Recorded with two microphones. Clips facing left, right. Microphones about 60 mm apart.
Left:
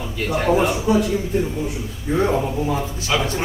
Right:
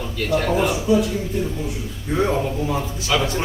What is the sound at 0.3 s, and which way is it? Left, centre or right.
Speech, centre.